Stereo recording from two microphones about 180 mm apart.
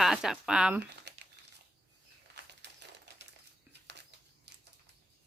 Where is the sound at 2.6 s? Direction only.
70° right (ahead or behind).